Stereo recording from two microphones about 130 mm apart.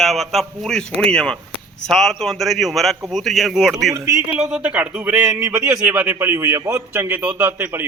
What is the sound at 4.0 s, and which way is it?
Speech, 20° right (ahead or behind).